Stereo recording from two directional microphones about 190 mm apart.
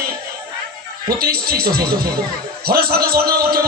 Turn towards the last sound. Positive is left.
turn(degrees=-55)  # may be behind; listen again after turning